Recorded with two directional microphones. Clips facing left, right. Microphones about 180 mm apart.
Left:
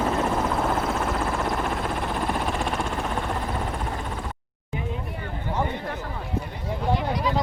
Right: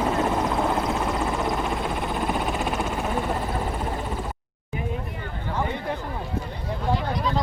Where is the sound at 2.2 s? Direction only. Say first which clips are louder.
Right 2 dB; centre (ahead or behind).